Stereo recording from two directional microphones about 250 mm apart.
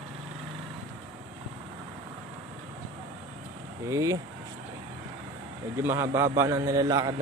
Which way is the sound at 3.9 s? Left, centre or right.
Centre.